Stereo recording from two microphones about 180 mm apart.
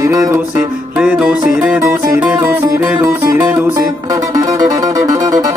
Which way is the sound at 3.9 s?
20° right (ahead or behind).